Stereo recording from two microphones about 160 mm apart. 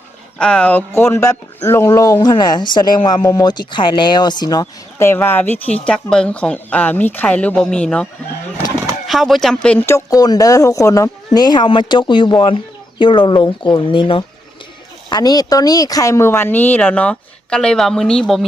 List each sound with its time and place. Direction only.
0.3 s speech: 5° left (ahead or behind)
9.0 s speech: centre (ahead or behind)